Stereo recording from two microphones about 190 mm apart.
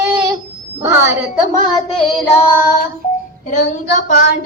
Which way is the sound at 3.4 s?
40° left (ahead or behind).